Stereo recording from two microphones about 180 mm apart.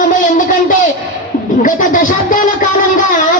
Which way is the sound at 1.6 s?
50° left (ahead or behind).